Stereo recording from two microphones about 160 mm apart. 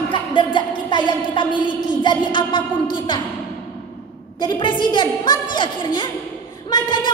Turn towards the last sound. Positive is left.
turn(degrees=30)  # may be behind; listen again after turning